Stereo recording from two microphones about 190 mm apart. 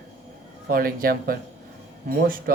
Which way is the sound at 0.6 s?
50° right (ahead or behind).